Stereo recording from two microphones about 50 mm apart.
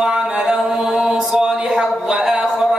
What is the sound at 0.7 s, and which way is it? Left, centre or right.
Mantra, centre.